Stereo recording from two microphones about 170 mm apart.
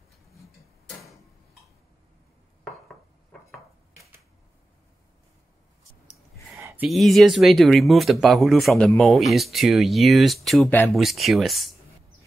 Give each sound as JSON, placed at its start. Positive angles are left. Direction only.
{"t": 0.8, "sound": "tick-tock", "side_deg": 0}
{"t": 6.5, "sound": "a sound", "side_deg": -15}
{"t": 6.9, "sound": "speech", "side_deg": 0}